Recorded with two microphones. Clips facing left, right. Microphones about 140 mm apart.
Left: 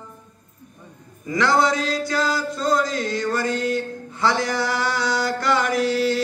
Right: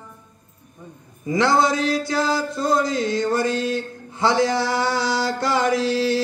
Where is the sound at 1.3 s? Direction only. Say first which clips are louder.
Right 1 dB; 25° right (ahead or behind).